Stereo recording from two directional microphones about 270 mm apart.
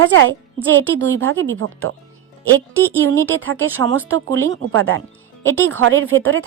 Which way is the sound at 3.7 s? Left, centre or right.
Right.